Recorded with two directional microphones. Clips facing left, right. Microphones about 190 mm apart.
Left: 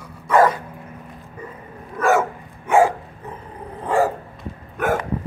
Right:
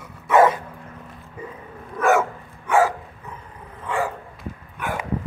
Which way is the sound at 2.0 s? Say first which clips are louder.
Left 1 dB; centre (ahead or behind).